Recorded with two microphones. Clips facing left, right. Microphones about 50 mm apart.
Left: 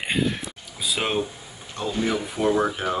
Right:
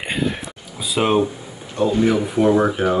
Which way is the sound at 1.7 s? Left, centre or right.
Right.